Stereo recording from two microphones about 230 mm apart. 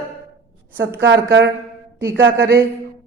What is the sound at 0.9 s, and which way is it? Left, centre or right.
Speech, right.